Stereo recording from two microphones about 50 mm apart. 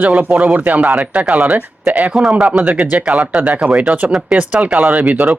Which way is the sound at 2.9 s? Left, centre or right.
Right.